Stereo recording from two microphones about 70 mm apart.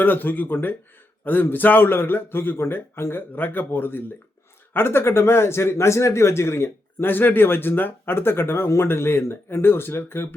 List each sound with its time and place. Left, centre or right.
0.0 s speech: left